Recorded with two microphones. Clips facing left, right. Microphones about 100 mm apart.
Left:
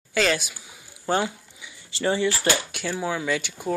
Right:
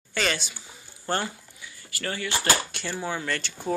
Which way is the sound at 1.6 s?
20° left (ahead or behind).